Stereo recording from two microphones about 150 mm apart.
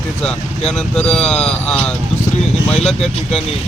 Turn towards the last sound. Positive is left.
turn(degrees=5)  # may be behind; listen again after turning